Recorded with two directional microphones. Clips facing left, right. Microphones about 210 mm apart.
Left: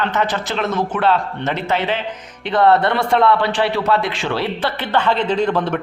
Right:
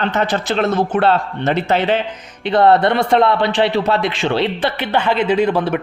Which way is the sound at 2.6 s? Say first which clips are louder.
Right 1 dB; 20° right (ahead or behind).